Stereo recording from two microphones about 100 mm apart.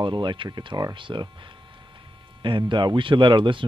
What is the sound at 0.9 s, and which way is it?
Speech, 55° right (ahead or behind).